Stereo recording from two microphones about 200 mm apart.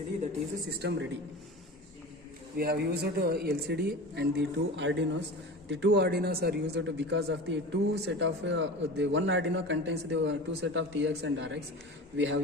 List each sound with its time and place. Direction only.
0.8 s speech: 60° right (ahead or behind)
2.6 s speech: 50° right (ahead or behind)